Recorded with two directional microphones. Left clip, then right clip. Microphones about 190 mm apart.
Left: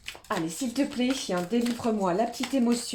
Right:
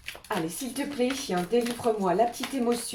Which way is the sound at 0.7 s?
40° left (ahead or behind).